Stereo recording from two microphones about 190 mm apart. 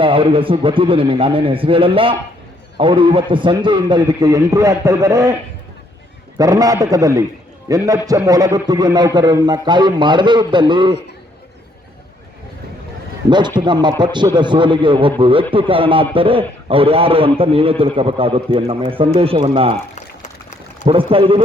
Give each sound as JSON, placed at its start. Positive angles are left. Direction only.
{"t": 0.0, "sound": "a man's voice", "side_deg": -25}
{"t": 6.3, "sound": "a man's voice", "side_deg": -20}
{"t": 13.7, "sound": "a man's voice", "side_deg": -25}
{"t": 20.8, "sound": "a man's voice", "side_deg": -30}